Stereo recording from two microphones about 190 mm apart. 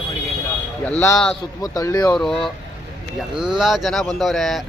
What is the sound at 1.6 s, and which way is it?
Speech, 20° left (ahead or behind).